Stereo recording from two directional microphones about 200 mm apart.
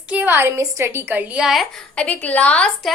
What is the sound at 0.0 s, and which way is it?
A woman's voice, 10° right (ahead or behind).